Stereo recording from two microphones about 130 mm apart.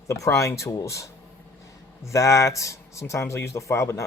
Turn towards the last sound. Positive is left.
turn(degrees=25)  # may be behind; listen again after turning